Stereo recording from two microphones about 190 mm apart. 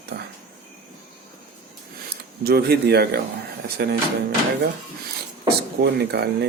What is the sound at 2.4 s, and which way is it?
Speech, 55° right (ahead or behind).